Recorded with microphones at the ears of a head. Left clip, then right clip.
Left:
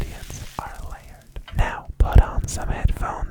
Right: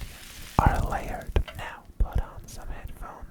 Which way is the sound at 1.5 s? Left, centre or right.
Left.